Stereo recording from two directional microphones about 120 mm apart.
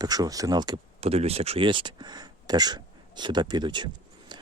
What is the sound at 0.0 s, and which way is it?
Speech, 35° right (ahead or behind).